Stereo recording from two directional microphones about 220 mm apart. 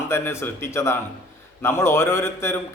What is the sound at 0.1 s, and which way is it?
A man's voice, 10° left (ahead or behind).